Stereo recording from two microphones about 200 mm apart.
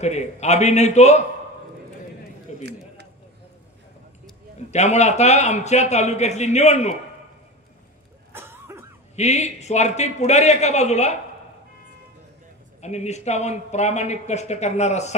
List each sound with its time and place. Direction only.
0.0 s speech: 35° left (ahead or behind)
2.5 s a sound: 35° left (ahead or behind)
4.6 s speech: 35° left (ahead or behind)
8.3 s cough: 10° right (ahead or behind)
9.1 s speech: 35° left (ahead or behind)
12.8 s speech: 35° left (ahead or behind)